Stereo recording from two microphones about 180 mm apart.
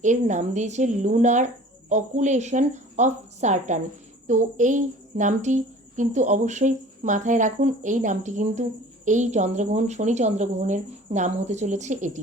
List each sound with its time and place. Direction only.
0.0 s a woman's voice: 45° right (ahead or behind)